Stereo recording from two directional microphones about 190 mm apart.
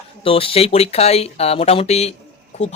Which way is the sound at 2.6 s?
5° left (ahead or behind).